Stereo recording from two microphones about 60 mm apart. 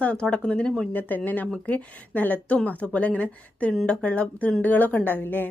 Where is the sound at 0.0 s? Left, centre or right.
Centre.